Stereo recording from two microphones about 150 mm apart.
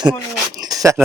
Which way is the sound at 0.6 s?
25° right (ahead or behind).